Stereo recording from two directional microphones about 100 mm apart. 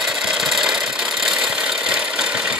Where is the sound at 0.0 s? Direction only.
5° right (ahead or behind).